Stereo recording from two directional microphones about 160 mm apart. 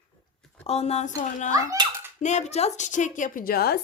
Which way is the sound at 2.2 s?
45° left (ahead or behind).